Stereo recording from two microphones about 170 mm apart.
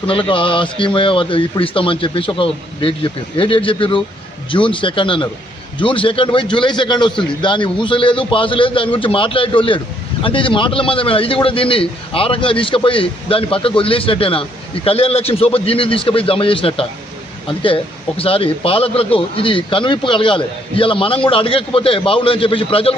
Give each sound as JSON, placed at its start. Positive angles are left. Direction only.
{"t": 0.1, "sound": "a man's voice", "side_deg": 30}
{"t": 18.2, "sound": "speech", "side_deg": 35}